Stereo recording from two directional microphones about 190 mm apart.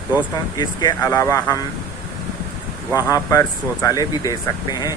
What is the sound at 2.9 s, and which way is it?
Speech, 15° left (ahead or behind).